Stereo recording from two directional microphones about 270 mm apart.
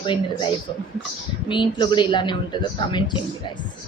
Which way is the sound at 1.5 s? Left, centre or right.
Centre.